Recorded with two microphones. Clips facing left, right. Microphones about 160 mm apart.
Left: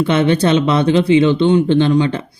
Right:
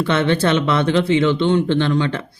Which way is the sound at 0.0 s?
20° left (ahead or behind).